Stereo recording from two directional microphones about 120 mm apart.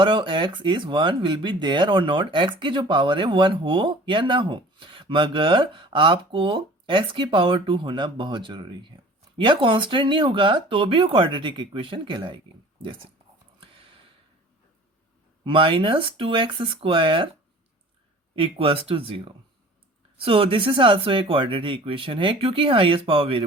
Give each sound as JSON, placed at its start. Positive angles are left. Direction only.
{"t": 0.0, "sound": "speech", "side_deg": -45}
{"t": 15.4, "sound": "speech", "side_deg": -45}
{"t": 18.3, "sound": "speech", "side_deg": -45}